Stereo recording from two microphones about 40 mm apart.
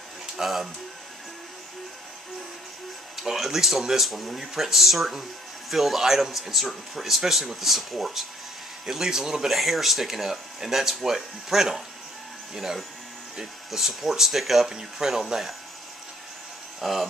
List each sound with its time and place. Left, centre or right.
0.4 s speech: centre
3.2 s speech: centre
13.4 s speech: centre
14.7 s speech: centre
16.8 s speech: centre